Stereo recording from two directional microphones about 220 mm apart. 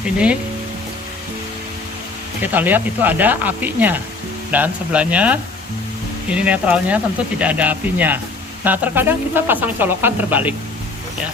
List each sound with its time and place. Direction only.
2.4 s speech: 10° right (ahead or behind)